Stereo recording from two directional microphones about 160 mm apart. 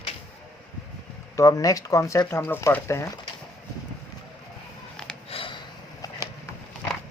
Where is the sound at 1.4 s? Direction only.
20° left (ahead or behind).